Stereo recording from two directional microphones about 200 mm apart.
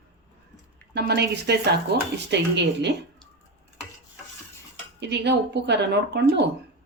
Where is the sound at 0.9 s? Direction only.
55° right (ahead or behind).